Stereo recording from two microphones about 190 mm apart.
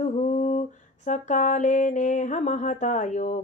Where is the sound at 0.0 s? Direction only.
40° left (ahead or behind).